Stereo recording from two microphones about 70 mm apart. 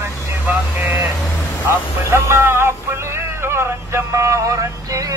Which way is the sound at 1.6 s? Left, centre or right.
Right.